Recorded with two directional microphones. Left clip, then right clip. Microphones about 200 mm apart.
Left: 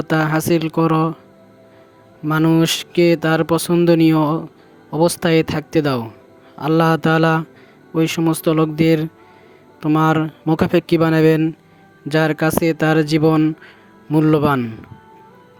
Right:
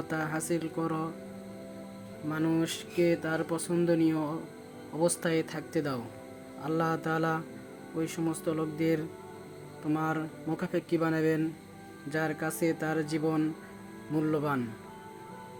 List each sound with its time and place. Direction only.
0.1 s speech: 50° left (ahead or behind)
2.3 s speech: 50° left (ahead or behind)